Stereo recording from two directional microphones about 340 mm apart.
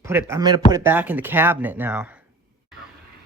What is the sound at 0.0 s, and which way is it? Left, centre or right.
Speech, centre.